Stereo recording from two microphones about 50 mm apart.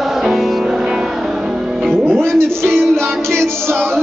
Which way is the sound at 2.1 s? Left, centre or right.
Right.